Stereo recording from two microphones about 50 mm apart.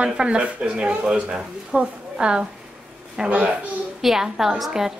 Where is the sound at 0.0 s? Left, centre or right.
Centre.